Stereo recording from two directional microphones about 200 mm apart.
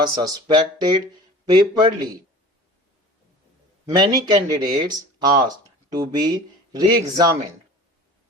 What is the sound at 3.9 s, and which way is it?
Speech, 20° right (ahead or behind).